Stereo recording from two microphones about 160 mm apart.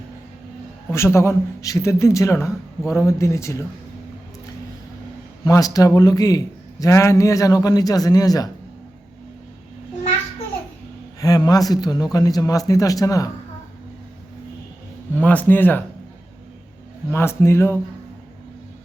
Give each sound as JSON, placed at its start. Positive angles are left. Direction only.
{"t": 0.9, "sound": "a man's voice", "side_deg": 15}
{"t": 5.5, "sound": "a man's voice", "side_deg": 20}
{"t": 11.2, "sound": "a man's voice", "side_deg": 25}
{"t": 15.1, "sound": "a man's voice", "side_deg": 10}
{"t": 17.1, "sound": "speech", "side_deg": 15}